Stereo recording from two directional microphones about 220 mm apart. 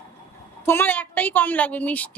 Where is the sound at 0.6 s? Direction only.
10° left (ahead or behind).